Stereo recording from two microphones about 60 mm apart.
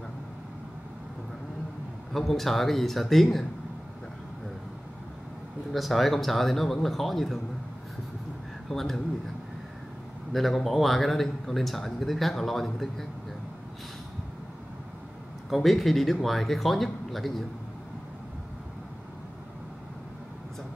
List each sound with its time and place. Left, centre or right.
2.1 s speech: centre
5.7 s speech: centre
8.6 s speech: centre
10.3 s speech: centre
15.5 s speech: centre